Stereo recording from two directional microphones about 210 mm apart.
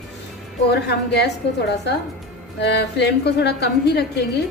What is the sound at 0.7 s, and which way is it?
Speech, 50° left (ahead or behind).